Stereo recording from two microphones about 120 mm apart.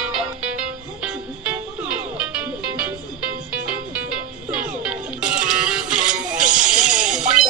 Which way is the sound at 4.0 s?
10° right (ahead or behind).